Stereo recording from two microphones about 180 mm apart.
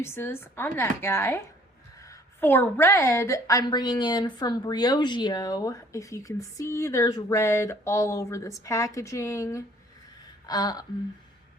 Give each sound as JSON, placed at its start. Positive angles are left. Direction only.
{"t": 0.0, "sound": "a woman's voice", "side_deg": 15}